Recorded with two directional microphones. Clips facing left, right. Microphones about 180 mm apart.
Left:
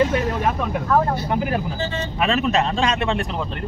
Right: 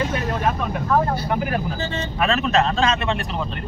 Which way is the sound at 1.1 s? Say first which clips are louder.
Left 1 dB; 20° left (ahead or behind).